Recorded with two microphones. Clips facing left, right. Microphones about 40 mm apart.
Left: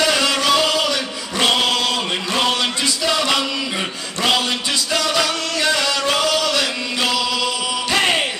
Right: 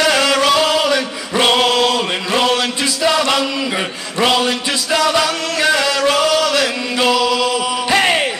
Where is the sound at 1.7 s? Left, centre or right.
Centre.